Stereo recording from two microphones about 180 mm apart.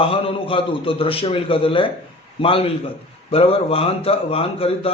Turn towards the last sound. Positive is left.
turn(degrees=30)  # may be behind; listen again after turning